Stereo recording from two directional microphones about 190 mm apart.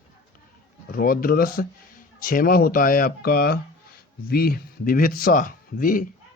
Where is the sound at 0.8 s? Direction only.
50° left (ahead or behind).